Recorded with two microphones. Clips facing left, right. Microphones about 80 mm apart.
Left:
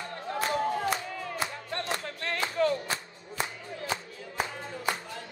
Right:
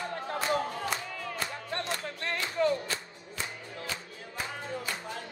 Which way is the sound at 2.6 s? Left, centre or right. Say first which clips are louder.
Left 1 dB; centre.